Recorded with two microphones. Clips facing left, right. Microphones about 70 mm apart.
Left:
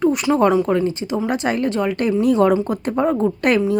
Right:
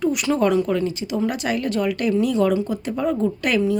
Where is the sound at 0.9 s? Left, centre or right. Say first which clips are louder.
Left 2 dB; left.